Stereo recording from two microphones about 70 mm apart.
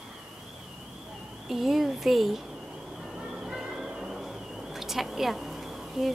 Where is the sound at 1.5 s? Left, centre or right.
Centre.